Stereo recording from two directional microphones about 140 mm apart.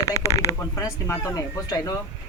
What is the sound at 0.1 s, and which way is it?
Speech, 20° left (ahead or behind).